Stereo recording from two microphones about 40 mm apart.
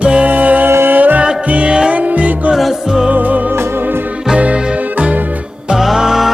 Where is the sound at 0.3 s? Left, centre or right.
Right.